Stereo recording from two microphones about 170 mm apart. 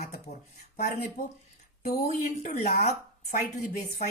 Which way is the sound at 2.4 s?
45° left (ahead or behind).